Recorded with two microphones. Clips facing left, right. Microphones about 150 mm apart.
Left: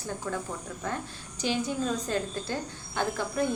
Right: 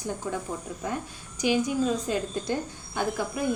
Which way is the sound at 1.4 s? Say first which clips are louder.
Right 5 dB; 10° right (ahead or behind).